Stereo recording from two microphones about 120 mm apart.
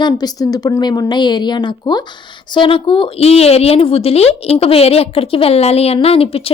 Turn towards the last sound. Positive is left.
turn(degrees=55)  # may be behind; listen again after turning